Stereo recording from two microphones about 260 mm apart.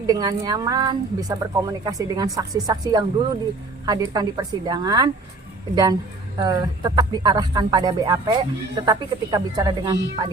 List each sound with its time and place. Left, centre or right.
0.1 s speech: centre